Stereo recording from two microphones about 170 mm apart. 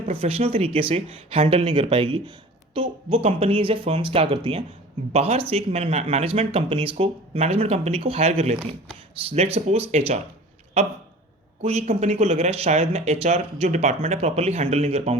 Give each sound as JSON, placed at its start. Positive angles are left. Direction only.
{"t": 0.0, "sound": "speech", "side_deg": -35}
{"t": 11.6, "sound": "speech", "side_deg": -40}